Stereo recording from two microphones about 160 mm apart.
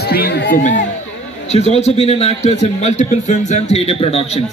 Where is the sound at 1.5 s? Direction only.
40° left (ahead or behind).